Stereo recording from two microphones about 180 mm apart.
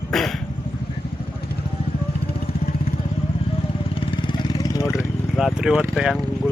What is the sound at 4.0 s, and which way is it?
Vehicle, 25° left (ahead or behind).